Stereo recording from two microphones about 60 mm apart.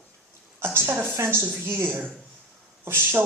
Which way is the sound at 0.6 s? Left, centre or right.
Right.